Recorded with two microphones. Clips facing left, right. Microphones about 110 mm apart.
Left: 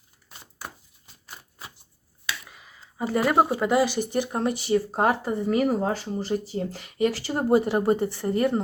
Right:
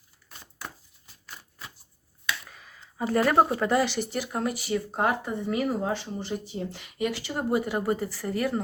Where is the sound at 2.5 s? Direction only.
5° left (ahead or behind).